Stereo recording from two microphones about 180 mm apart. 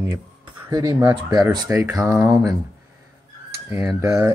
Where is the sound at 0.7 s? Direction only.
20° right (ahead or behind).